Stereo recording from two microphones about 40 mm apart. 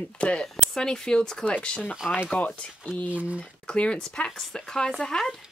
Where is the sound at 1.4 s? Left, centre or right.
Left.